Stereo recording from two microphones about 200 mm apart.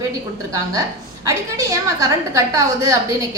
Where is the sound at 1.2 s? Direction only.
15° right (ahead or behind).